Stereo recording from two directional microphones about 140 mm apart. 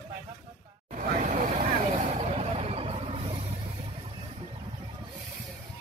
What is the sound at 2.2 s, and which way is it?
Vehicle, 45° right (ahead or behind).